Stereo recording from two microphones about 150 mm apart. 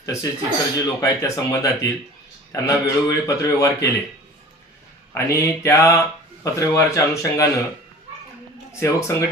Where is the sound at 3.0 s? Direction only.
25° left (ahead or behind).